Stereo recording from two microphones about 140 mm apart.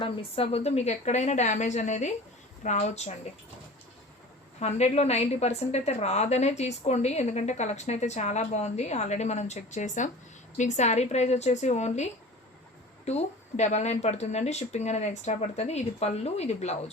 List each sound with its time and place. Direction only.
0.0 s a woman's voice: 40° left (ahead or behind)
4.6 s a woman's voice: 50° left (ahead or behind)
13.1 s a woman's voice: 55° left (ahead or behind)